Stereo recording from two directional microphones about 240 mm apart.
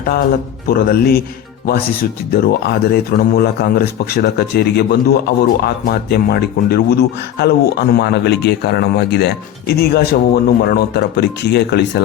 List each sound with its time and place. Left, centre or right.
0.7 s speech: left
2.3 s speech: left